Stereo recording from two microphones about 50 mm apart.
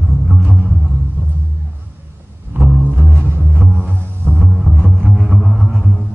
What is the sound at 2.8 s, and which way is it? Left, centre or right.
Music, right.